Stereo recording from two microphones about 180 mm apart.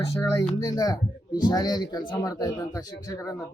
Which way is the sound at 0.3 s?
20° left (ahead or behind).